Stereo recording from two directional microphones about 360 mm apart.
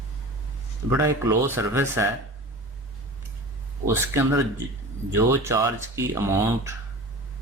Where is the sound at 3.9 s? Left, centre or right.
Centre.